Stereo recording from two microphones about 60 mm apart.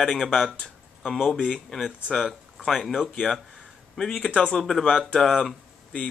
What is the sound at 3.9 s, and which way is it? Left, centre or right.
Speech, centre.